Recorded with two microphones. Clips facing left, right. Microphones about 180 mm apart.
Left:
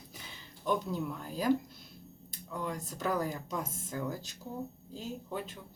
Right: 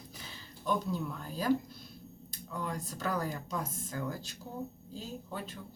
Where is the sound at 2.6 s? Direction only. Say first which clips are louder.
Left 1 dB; 15° left (ahead or behind).